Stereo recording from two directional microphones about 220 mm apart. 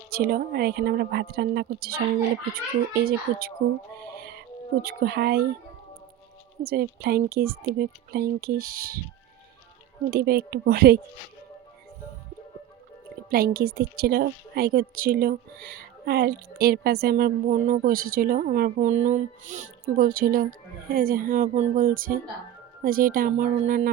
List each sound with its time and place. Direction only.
0.1 s speech: 45° right (ahead or behind)
4.8 s speech: 45° right (ahead or behind)
6.6 s speech: 45° right (ahead or behind)
10.1 s speech: 45° right (ahead or behind)
13.3 s a woman's voice: 45° right (ahead or behind)